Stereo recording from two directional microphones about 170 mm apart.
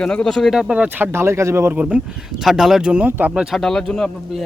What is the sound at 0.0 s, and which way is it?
Speech, 5° left (ahead or behind).